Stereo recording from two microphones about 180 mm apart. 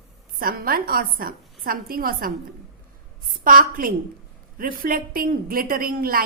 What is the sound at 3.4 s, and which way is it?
A woman's voice, 50° right (ahead or behind).